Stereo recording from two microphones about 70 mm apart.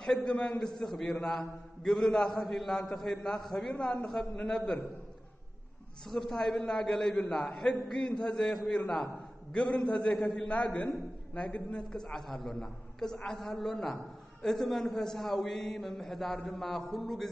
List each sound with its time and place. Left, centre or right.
0.0 s a man's voice: centre
6.0 s a man's voice: centre
10.5 s a man's voice: centre